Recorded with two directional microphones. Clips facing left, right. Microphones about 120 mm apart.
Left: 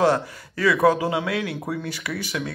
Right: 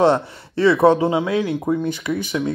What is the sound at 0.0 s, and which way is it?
Speech, 25° right (ahead or behind).